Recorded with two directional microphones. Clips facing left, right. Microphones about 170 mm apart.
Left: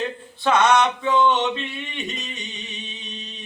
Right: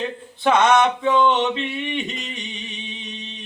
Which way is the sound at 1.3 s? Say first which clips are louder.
Right 2 dB; 15° right (ahead or behind).